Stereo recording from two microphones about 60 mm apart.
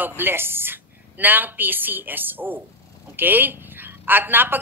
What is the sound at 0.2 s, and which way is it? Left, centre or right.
A man's voice, right.